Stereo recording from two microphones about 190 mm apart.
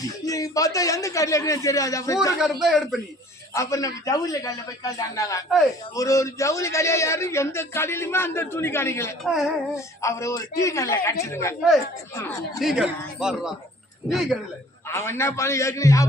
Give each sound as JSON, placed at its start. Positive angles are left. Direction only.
{"t": 0.0, "sound": "a man's voice", "side_deg": 20}
{"t": 2.4, "sound": "speech", "side_deg": 0}
{"t": 3.5, "sound": "a man's voice", "side_deg": 15}
{"t": 9.2, "sound": "speech", "side_deg": 0}
{"t": 9.7, "sound": "a man's voice", "side_deg": 15}
{"t": 12.5, "sound": "speech", "side_deg": -5}
{"t": 14.8, "sound": "a man's voice", "side_deg": 15}